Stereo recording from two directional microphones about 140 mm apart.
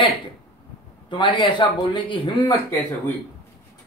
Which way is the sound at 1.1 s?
35° left (ahead or behind).